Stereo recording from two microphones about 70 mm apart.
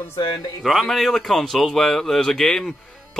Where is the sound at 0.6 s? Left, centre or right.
Centre.